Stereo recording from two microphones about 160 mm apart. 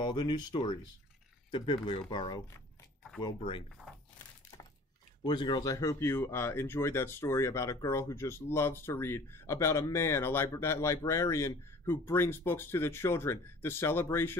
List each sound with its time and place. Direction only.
0.0 s speech: 25° left (ahead or behind)
5.2 s speech: 30° left (ahead or behind)